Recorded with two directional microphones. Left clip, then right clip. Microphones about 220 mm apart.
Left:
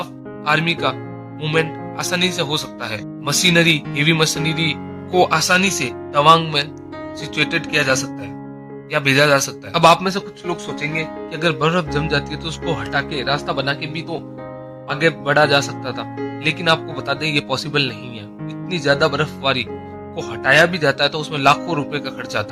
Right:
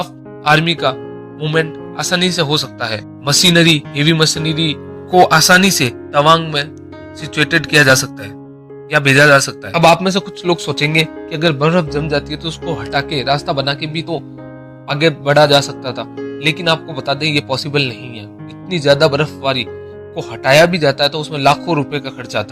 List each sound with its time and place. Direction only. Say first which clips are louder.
0.0 s speech: right 6 dB; 20° right (ahead or behind)
2.0 s speech: right 4 dB; 20° right (ahead or behind)
5.5 s speech: right 6 dB; 30° right (ahead or behind)
6.1 s speech: right 1 dB; 15° right (ahead or behind)
10.5 s speech: right 8 dB; centre (ahead or behind)
10.8 s speech: right 9 dB; 35° right (ahead or behind)
11.3 s speech: left 1 dB; 15° right (ahead or behind)
12.6 s speech: even; centre (ahead or behind)
12.9 s speech: right 6 dB; 10° right (ahead or behind)
19.4 s speech: right 2 dB; centre (ahead or behind)